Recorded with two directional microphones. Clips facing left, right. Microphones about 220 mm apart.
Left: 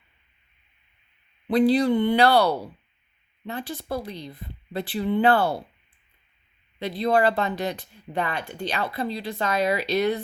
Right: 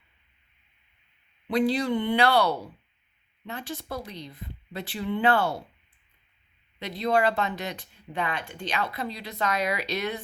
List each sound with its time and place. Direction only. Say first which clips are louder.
1.5 s speech: left 5 dB; 35° left (ahead or behind)
6.7 s speech: left 3 dB; 30° left (ahead or behind)